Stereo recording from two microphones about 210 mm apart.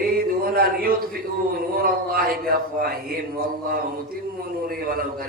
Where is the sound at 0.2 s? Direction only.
45° right (ahead or behind).